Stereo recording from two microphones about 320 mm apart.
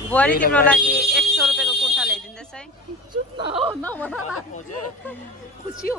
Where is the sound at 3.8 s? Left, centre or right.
Centre.